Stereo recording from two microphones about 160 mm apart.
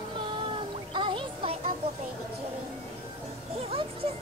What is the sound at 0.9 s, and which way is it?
Music, 30° right (ahead or behind).